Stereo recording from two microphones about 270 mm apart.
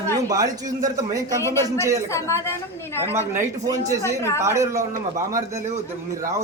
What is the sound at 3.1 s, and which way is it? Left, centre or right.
A man's voice, centre.